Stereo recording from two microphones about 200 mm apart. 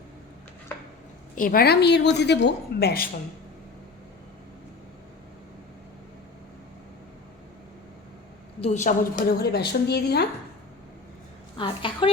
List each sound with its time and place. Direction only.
1.4 s a woman's voice: 45° left (ahead or behind)
8.6 s a woman's voice: 35° left (ahead or behind); by 10.2 s 55° left (ahead or behind)
11.5 s a woman's voice: 25° left (ahead or behind)